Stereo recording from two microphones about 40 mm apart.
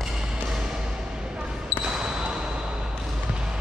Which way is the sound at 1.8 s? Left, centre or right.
Centre.